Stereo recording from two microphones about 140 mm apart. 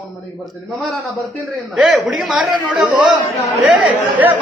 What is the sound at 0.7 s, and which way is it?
A man's voice, centre (ahead or behind).